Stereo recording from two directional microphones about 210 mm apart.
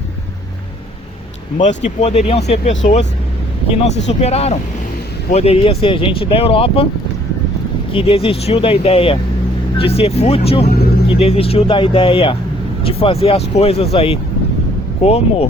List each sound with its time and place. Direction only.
1.6 s speech: 30° left (ahead or behind)
7.9 s speech: 25° left (ahead or behind)